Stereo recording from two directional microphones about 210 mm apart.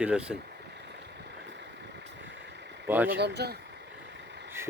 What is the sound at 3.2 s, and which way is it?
Speech, 50° right (ahead or behind).